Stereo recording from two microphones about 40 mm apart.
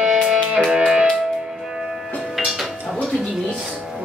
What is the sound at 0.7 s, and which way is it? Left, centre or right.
Music, right.